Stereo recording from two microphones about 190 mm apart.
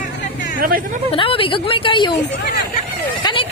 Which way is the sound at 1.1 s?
30° left (ahead or behind).